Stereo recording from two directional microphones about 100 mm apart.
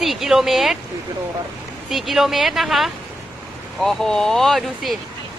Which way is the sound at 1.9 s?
Centre (ahead or behind).